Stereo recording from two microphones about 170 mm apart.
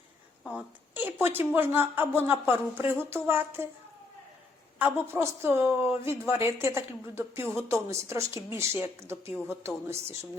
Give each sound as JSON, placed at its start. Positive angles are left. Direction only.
{"t": 0.5, "sound": "a woman's voice", "side_deg": -10}
{"t": 4.8, "sound": "a woman's voice", "side_deg": -15}